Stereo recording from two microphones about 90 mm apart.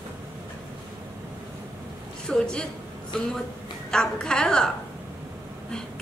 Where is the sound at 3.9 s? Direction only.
5° left (ahead or behind).